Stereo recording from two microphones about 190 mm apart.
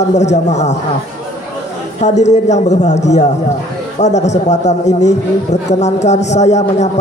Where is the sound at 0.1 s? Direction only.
40° left (ahead or behind).